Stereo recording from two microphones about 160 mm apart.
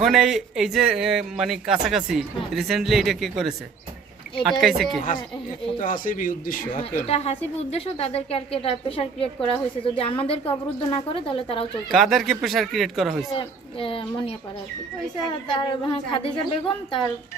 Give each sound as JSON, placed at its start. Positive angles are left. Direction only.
{"t": 0.0, "sound": "a man's voice", "side_deg": 0}
{"t": 5.8, "sound": "speech", "side_deg": 55}
{"t": 7.1, "sound": "a woman's voice", "side_deg": 40}
{"t": 11.9, "sound": "a man's voice", "side_deg": 0}
{"t": 13.3, "sound": "a woman's voice", "side_deg": 35}
{"t": 15.4, "sound": "a woman's voice", "side_deg": 35}